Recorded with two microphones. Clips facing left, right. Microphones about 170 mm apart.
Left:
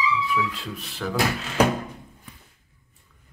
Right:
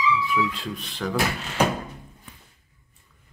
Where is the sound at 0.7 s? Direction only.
5° left (ahead or behind).